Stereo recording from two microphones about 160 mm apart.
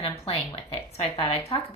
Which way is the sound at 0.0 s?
35° left (ahead or behind).